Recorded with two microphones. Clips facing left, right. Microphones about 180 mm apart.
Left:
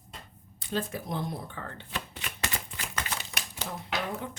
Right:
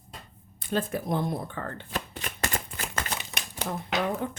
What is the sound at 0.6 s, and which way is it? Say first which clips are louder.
Shuffling cards: right 4 dB; 55° right (ahead or behind).